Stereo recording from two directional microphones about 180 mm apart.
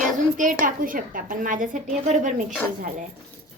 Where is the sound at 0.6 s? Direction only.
50° right (ahead or behind).